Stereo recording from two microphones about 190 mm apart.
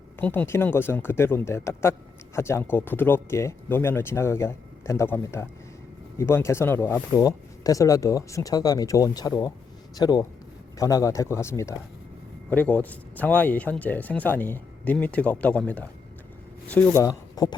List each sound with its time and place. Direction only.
0.2 s speech: 10° left (ahead or behind)